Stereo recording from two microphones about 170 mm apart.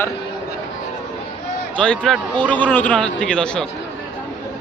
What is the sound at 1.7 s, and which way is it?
Speech, 5° left (ahead or behind).